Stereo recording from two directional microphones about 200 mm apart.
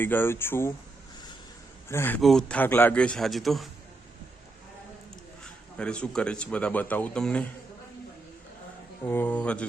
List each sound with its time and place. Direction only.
0.0 s speech: 10° left (ahead or behind)
1.9 s a man's voice: 10° left (ahead or behind)
5.4 s speech: 5° left (ahead or behind)
9.0 s speech: 10° left (ahead or behind)